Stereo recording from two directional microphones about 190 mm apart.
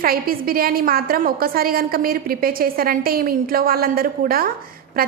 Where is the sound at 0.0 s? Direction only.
50° right (ahead or behind).